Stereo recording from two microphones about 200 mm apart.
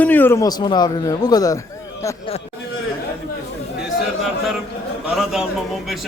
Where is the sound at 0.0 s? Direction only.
10° left (ahead or behind).